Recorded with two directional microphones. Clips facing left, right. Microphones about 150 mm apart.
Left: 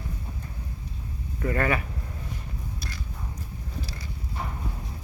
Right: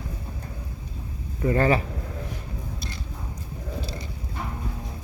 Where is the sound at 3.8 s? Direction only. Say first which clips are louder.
Right 3 dB; 25° right (ahead or behind).